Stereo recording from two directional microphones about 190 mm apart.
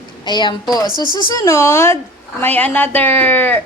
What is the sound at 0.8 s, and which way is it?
Speech, 20° right (ahead or behind).